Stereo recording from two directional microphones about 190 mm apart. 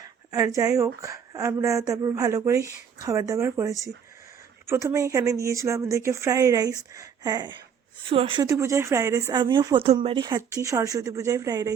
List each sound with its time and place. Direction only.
0.0 s a sound: 15° right (ahead or behind)
1.0 s speech: 15° right (ahead or behind)
8.4 s speech: 15° right (ahead or behind)